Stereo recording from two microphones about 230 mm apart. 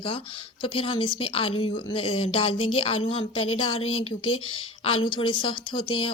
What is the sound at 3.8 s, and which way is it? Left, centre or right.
Speech, left.